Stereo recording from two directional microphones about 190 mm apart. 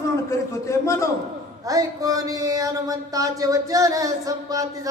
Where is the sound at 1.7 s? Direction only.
20° right (ahead or behind).